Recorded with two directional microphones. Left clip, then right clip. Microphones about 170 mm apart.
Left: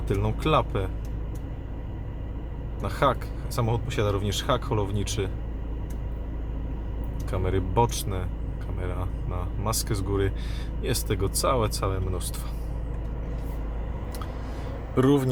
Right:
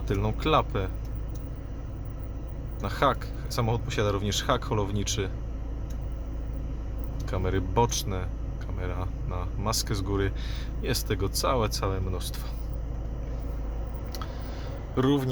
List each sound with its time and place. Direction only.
0.1 s speech: 5° left (ahead or behind)
2.8 s speech: 5° left (ahead or behind)
7.3 s speech: 5° left (ahead or behind)
14.9 s a man's voice: 30° left (ahead or behind)